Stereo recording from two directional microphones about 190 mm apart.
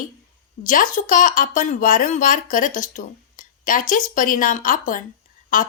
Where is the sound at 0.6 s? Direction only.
45° left (ahead or behind).